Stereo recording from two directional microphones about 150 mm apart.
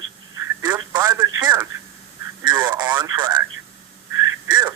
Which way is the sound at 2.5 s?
30° right (ahead or behind).